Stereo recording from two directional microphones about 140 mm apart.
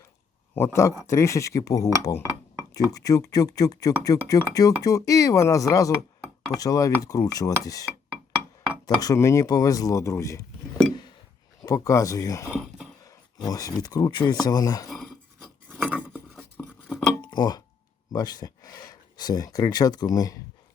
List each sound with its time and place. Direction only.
0.5 s speech: 15° left (ahead or behind)
9.0 s speech: 25° left (ahead or behind)
11.6 s speech: 20° left (ahead or behind)
12.5 s speech: 5° right (ahead or behind)
13.5 s speech: 25° left (ahead or behind)
14.8 s a sound: centre (ahead or behind)
15.9 s a sound: 10° right (ahead or behind)
17.2 s a sound: 30° left (ahead or behind)
18.1 s speech: 30° left (ahead or behind)